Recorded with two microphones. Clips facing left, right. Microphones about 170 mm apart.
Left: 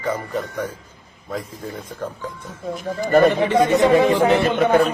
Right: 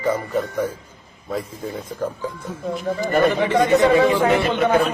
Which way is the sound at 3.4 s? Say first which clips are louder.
Even; 15° left (ahead or behind).